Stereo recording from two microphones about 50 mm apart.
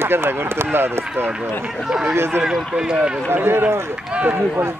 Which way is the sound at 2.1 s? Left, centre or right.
Right.